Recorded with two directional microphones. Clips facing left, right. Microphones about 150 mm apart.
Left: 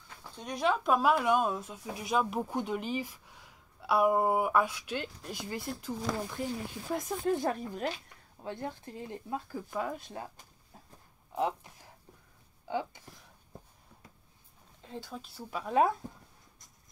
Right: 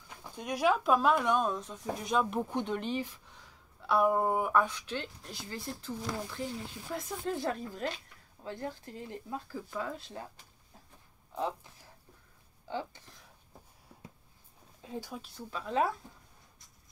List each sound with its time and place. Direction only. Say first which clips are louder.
0.2 s speech: right 2 dB; 10° right (ahead or behind); by 10.2 s 15° left (ahead or behind)
11.3 s speech: left 3 dB; 15° left (ahead or behind)
14.8 s speech: right 2 dB; 15° right (ahead or behind)
15.2 s speech: left 2 dB; 10° left (ahead or behind)